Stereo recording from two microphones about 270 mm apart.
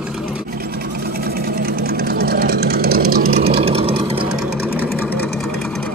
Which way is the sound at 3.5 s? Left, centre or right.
Right.